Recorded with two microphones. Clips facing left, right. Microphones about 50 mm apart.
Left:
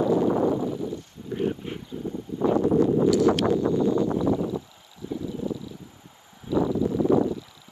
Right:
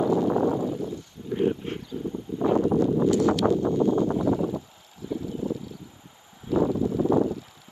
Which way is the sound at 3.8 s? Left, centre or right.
Right.